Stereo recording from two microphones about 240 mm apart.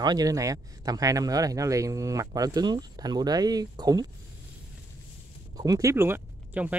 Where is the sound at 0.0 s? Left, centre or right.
Centre.